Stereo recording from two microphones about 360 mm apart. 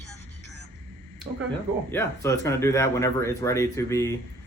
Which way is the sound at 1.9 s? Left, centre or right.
Centre.